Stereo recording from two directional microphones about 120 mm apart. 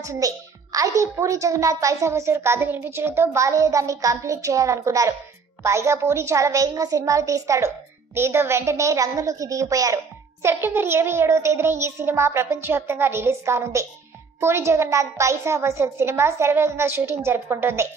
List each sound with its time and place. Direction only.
0.0 s a woman's voice: 30° right (ahead or behind)